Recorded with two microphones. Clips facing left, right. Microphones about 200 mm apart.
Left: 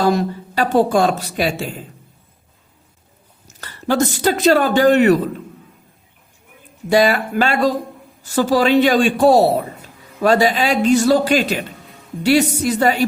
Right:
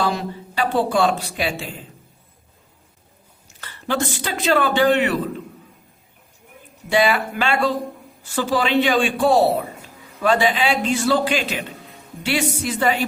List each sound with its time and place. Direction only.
0.0 s speech: 45° left (ahead or behind)
3.4 s speech: 40° left (ahead or behind)
6.9 s a man's voice: 40° left (ahead or behind)